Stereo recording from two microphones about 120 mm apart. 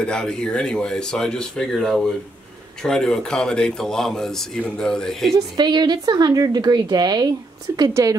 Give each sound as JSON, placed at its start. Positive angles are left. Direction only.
{"t": 0.0, "sound": "speech", "side_deg": 5}
{"t": 5.6, "sound": "a woman's voice", "side_deg": -35}